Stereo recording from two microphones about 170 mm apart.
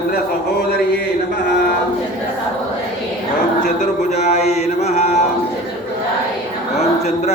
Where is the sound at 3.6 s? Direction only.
45° left (ahead or behind).